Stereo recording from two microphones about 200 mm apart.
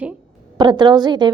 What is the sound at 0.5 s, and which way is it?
Speech, 20° right (ahead or behind).